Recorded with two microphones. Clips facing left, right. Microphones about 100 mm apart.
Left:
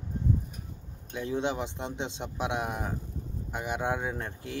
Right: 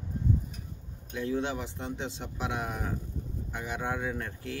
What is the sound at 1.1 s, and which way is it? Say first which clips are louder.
Speech: left 1 dB; 20° left (ahead or behind).